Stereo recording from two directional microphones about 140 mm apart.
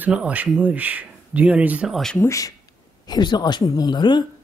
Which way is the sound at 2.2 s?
25° left (ahead or behind).